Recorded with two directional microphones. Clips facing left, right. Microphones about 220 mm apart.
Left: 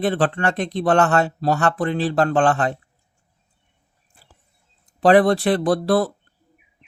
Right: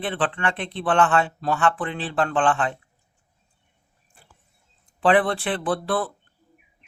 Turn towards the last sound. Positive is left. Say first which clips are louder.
# left 6 dB
turn(degrees=40)  # may be behind; listen again after turning